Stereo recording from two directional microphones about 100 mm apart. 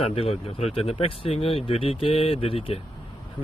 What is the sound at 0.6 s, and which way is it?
Speech, 90° left.